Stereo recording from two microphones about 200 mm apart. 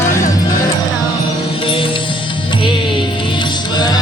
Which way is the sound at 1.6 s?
25° left (ahead or behind).